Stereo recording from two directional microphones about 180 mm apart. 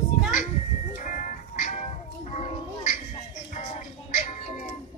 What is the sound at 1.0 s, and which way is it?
Music, 45° left (ahead or behind).